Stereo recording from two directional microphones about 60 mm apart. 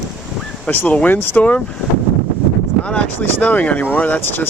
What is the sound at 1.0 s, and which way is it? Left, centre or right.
Speech, left.